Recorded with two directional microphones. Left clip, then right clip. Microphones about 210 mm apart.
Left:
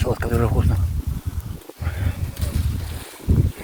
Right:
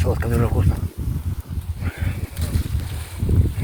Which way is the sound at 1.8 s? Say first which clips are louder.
Right 1 dB; centre (ahead or behind).